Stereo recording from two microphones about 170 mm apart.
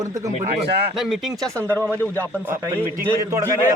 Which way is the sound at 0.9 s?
Centre (ahead or behind).